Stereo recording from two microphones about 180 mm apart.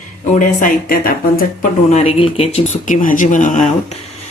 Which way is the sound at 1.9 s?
35° left (ahead or behind).